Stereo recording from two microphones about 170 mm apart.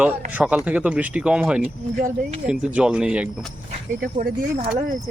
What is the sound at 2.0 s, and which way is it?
Speech, 50° right (ahead or behind).